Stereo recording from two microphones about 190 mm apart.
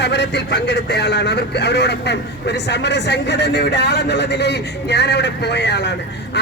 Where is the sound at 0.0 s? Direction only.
65° left (ahead or behind).